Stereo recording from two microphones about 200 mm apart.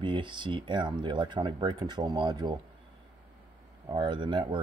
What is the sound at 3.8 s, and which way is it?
Speech, 25° right (ahead or behind).